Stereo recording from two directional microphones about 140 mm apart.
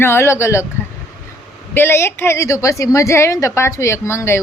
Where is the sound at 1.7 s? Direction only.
15° left (ahead or behind).